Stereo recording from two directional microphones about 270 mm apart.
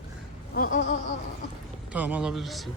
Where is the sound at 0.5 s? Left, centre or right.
Left.